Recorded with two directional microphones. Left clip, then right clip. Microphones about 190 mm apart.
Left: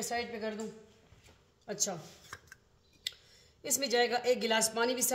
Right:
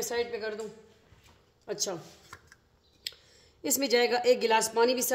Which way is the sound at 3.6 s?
40° right (ahead or behind).